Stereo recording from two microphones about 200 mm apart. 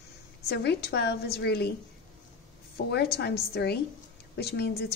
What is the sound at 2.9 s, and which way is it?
A woman's voice, 55° left (ahead or behind).